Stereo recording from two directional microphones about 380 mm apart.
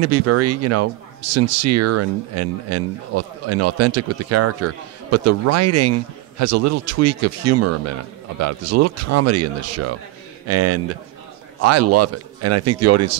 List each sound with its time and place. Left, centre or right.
0.0 s speech: right